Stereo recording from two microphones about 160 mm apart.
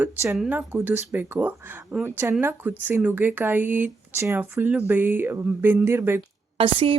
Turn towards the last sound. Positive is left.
turn(degrees=-30)  # may be behind; listen again after turning